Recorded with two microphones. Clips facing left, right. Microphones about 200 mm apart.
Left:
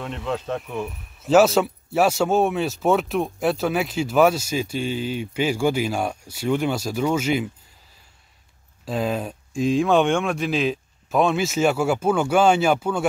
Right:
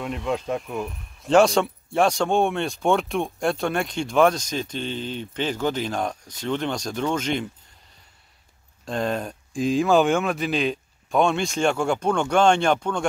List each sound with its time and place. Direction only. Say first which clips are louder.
0.0 s speech: right 1 dB; centre (ahead or behind)
8.8 s speech: left 1 dB; 5° left (ahead or behind)